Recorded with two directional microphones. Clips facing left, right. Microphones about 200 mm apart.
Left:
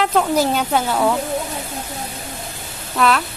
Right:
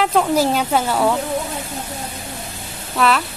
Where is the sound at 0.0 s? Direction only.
5° right (ahead or behind).